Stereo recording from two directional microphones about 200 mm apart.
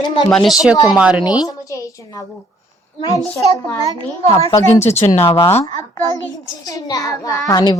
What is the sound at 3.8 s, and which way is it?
Speech, 15° right (ahead or behind).